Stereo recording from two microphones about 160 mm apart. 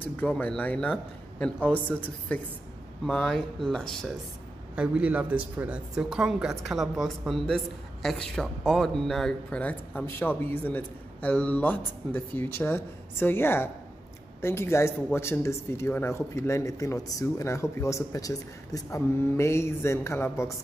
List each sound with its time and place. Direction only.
0.0 s a woman's voice: 10° left (ahead or behind)
4.7 s a woman's voice: 10° right (ahead or behind); by 20.5 s 15° left (ahead or behind)